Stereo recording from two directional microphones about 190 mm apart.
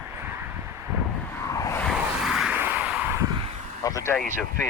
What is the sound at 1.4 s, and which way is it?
Vehicle, 15° left (ahead or behind).